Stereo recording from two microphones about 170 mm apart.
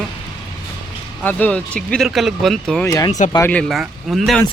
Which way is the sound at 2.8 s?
20° left (ahead or behind).